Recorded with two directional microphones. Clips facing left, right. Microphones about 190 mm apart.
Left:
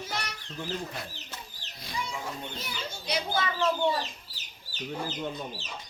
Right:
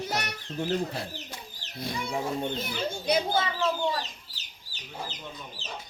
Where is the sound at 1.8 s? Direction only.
55° right (ahead or behind).